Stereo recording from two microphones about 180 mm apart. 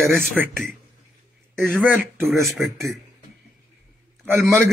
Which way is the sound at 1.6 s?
10° right (ahead or behind).